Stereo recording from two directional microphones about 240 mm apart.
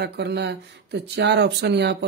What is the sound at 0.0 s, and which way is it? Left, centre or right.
Speech, right.